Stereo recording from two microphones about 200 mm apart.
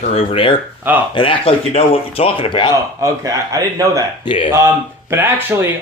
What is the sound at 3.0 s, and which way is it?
Speech, 15° right (ahead or behind).